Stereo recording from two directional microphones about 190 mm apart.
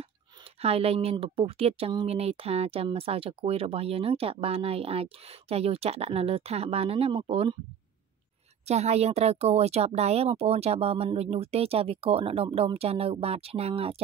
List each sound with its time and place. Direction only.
0.6 s a woman's voice: 30° right (ahead or behind)
8.6 s a woman's voice: 35° right (ahead or behind)